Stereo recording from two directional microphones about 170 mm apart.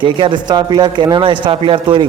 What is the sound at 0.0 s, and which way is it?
A man's voice, 30° right (ahead or behind).